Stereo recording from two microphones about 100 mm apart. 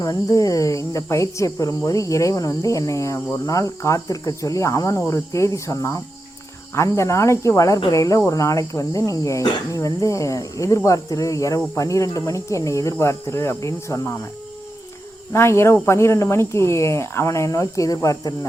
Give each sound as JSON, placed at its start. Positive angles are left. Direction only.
{"t": 0.0, "sound": "speech", "side_deg": 35}
{"t": 15.3, "sound": "speech", "side_deg": 25}